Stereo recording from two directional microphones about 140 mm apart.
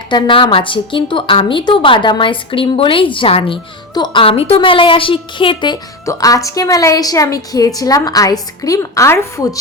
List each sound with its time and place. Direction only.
0.1 s a woman's voice: 35° left (ahead or behind); by 9.6 s 20° left (ahead or behind)